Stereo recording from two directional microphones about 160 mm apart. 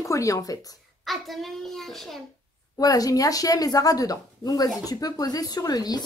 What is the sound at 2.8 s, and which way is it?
Speech, 20° left (ahead or behind).